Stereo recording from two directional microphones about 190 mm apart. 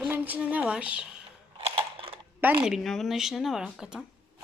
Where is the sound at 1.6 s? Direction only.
30° right (ahead or behind).